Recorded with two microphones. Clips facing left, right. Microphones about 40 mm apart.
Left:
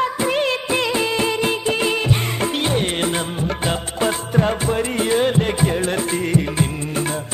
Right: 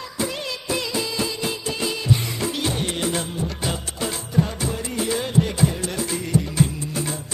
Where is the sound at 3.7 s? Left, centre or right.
Left.